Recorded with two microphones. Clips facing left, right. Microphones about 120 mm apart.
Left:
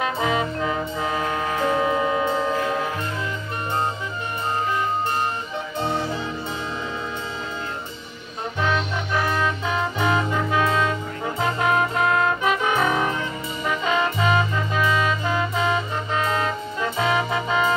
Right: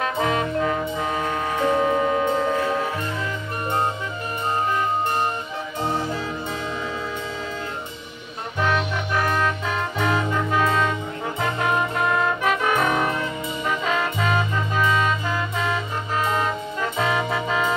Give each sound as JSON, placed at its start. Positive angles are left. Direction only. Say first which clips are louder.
{"t": 0.0, "sound": "music", "louder": "even", "side_deg": 5}
{"t": 5.8, "sound": "music", "louder": "even", "side_deg": -10}
{"t": 8.5, "sound": "music", "louder": "right 1 dB", "side_deg": -5}
{"t": 11.7, "sound": "music", "louder": "left 2 dB", "side_deg": 0}
{"t": 12.6, "sound": "music", "louder": "right 1 dB", "side_deg": 10}
{"t": 13.8, "sound": "music", "louder": "left 4 dB", "side_deg": 0}
{"t": 15.3, "sound": "music", "louder": "left 3 dB", "side_deg": 20}
{"t": 17.0, "sound": "music", "louder": "left 1 dB", "side_deg": 10}